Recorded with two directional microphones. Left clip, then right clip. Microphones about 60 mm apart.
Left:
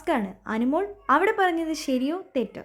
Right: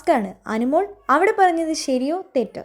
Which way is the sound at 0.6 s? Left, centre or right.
Right.